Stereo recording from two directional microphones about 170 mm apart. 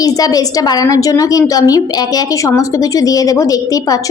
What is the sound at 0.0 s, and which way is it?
A woman's voice, 20° left (ahead or behind).